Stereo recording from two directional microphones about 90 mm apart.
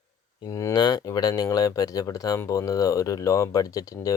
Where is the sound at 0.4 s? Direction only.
40° left (ahead or behind).